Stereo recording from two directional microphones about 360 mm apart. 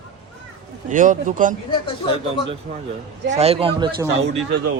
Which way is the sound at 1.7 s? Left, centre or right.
Centre.